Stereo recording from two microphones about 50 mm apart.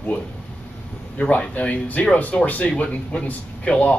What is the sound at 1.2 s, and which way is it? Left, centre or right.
Speech, left.